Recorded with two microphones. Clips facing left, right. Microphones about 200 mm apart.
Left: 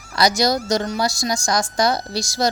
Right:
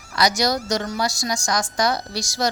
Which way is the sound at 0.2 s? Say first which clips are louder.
Left 2 dB; 25° left (ahead or behind).